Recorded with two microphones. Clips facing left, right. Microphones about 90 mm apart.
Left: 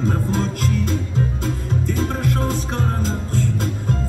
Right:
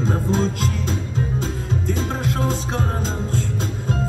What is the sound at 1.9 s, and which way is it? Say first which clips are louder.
Music: left 2 dB; 50° left (ahead or behind).